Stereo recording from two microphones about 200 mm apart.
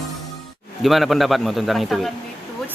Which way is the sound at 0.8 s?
Centre (ahead or behind).